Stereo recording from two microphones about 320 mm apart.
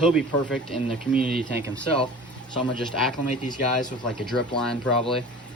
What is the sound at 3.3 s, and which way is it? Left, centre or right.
Speech, left.